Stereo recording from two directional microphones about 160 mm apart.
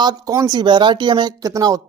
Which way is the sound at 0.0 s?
25° right (ahead or behind).